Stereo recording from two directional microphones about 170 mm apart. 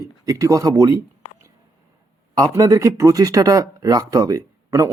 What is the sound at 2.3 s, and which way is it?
Speech, 20° right (ahead or behind).